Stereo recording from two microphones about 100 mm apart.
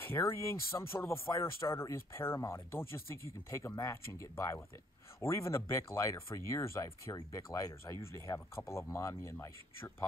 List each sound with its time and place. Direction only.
0.0 s speech: 25° left (ahead or behind)